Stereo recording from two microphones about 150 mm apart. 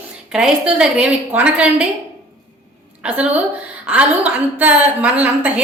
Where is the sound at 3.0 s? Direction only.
10° right (ahead or behind).